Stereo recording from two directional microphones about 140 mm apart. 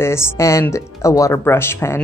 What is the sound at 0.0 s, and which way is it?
Speech, 20° left (ahead or behind).